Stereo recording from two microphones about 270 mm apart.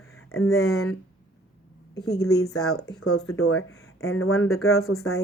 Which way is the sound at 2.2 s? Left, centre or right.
Left.